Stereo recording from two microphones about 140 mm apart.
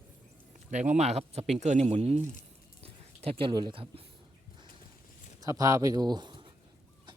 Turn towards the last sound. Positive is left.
turn(degrees=-35)  # may be behind; listen again after turning